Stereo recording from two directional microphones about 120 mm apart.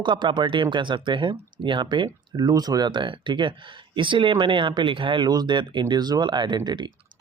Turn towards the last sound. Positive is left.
turn(degrees=-40)  # may be behind; listen again after turning